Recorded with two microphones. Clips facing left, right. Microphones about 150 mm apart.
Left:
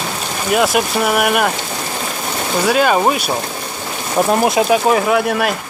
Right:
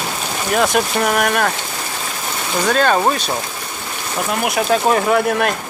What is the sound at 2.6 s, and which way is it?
Speech, 10° left (ahead or behind).